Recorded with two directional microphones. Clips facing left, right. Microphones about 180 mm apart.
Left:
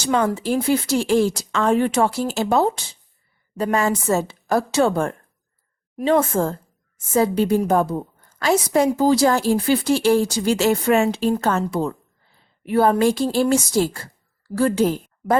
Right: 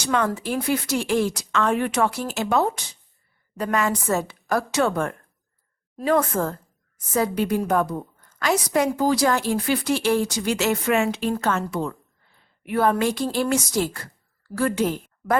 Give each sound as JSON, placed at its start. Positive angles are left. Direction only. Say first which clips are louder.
{"t": 0.0, "sound": "a woman's voice", "louder": "left 3 dB", "side_deg": 30}